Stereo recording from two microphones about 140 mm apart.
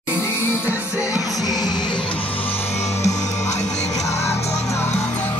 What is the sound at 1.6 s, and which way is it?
Crowd, 30° left (ahead or behind).